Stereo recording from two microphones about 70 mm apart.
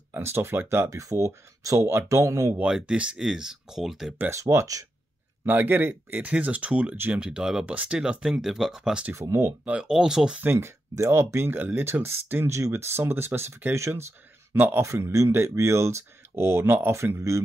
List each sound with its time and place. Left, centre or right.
0.1 s speech: right
0.8 s speech: right
2.6 s speech: centre
4.3 s speech: right
5.4 s speech: right; by 9.1 s centre
9.1 s speech: right
9.7 s speech: centre
10.4 s speech: right
13.7 s speech: right
14.5 s speech: right
14.8 s speech: right
16.9 s speech: right